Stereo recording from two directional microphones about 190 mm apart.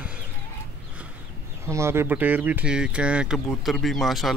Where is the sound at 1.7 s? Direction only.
15° right (ahead or behind).